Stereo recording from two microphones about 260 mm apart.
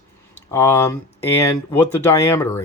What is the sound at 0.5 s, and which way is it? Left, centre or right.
Speech, centre.